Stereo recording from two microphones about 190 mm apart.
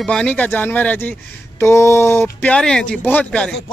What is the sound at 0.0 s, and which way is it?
Speech, 5° left (ahead or behind).